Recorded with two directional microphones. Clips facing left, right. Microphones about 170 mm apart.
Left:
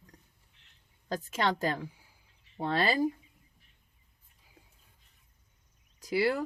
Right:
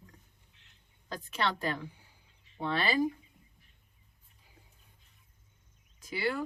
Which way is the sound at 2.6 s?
40° left (ahead or behind).